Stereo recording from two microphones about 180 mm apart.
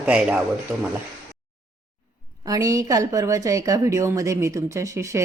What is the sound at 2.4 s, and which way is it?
A woman's voice, 20° right (ahead or behind).